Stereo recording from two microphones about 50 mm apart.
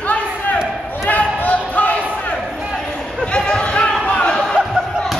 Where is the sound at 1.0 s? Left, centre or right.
Left.